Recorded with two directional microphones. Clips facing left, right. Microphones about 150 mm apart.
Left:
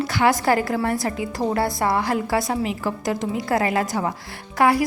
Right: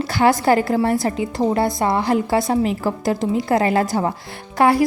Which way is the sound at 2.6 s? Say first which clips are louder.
Right 5 dB; 40° right (ahead or behind).